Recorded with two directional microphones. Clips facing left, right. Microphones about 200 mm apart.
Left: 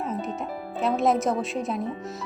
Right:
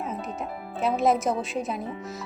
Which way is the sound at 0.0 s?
Centre (ahead or behind).